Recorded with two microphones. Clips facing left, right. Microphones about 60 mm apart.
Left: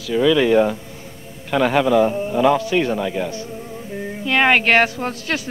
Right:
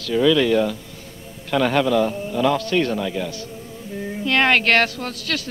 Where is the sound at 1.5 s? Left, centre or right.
Centre.